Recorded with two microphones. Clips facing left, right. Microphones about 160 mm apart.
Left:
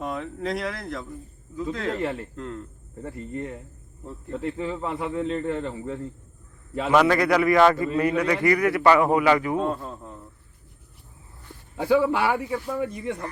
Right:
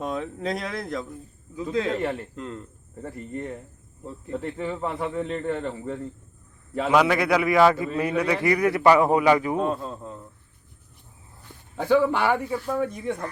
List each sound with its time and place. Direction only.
0.0 s speech: 20° right (ahead or behind)
2.3 s speech: 20° right (ahead or behind)
3.0 s a man's voice: centre (ahead or behind)
8.4 s a man's voice: 20° right (ahead or behind)
11.8 s speech: 5° left (ahead or behind)